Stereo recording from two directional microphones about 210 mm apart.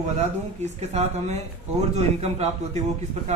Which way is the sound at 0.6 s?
30° right (ahead or behind).